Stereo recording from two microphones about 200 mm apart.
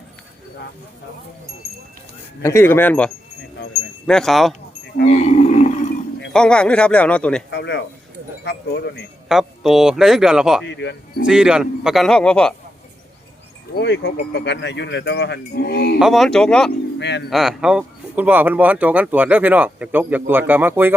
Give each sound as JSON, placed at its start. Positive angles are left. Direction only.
{"t": 2.4, "sound": "a man's voice", "side_deg": 15}
{"t": 5.0, "sound": "livestock", "side_deg": 35}
{"t": 6.3, "sound": "speech", "side_deg": 5}
{"t": 7.5, "sound": "speech", "side_deg": 60}
{"t": 9.3, "sound": "speech", "side_deg": 0}
{"t": 10.7, "sound": "speech", "side_deg": 60}
{"t": 11.3, "sound": "speech", "side_deg": -5}
{"t": 13.8, "sound": "speech", "side_deg": 60}
{"t": 16.0, "sound": "speech", "side_deg": 0}
{"t": 17.0, "sound": "speech", "side_deg": 60}
{"t": 17.2, "sound": "speech", "side_deg": 0}